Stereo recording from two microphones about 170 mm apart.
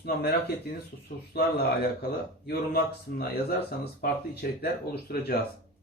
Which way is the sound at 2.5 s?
65° left (ahead or behind).